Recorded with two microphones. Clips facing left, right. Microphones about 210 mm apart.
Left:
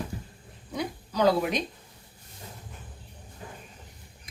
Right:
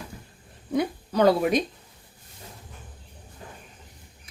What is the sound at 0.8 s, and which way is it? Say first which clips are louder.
Speech: right 4 dB; 55° right (ahead or behind).